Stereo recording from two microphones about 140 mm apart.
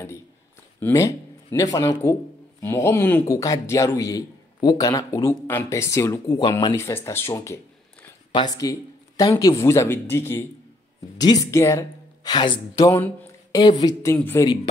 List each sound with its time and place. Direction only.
0.7 s a man's voice: 20° left (ahead or behind)
8.3 s a man's voice: 30° left (ahead or behind)
14.1 s a man's voice: 15° left (ahead or behind)